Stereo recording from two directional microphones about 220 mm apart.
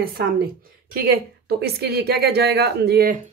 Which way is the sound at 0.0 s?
45° right (ahead or behind).